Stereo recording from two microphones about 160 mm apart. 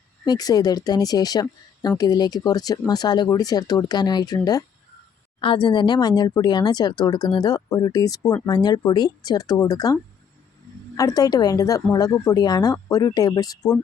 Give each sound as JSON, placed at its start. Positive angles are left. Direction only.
{"t": 0.3, "sound": "speech", "side_deg": 25}